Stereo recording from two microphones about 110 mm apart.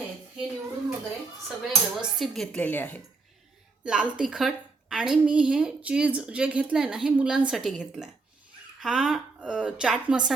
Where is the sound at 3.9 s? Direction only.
5° right (ahead or behind).